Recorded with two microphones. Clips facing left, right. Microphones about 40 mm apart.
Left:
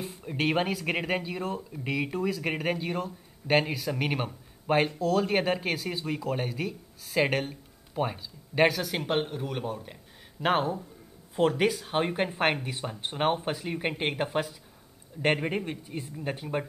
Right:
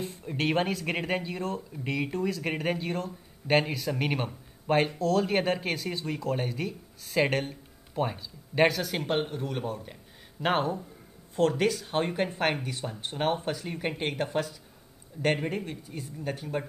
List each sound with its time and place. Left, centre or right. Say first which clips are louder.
0.0 s speech: left 1 dB; centre
11.3 s speech: even; centre